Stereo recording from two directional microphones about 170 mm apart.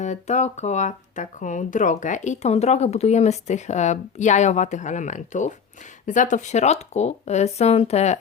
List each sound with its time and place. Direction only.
0.0 s speech: 45° left (ahead or behind)